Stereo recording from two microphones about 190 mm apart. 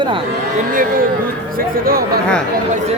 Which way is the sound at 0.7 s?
45° right (ahead or behind).